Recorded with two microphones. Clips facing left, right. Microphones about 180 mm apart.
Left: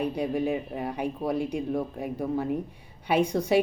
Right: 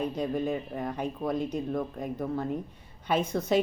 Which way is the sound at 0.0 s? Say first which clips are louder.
Left 2 dB; 10° left (ahead or behind).